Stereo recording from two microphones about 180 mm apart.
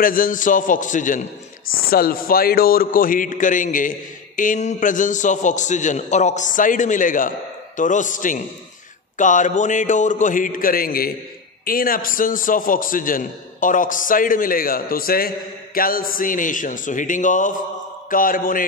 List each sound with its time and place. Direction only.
0.0 s a man's voice: 50° left (ahead or behind)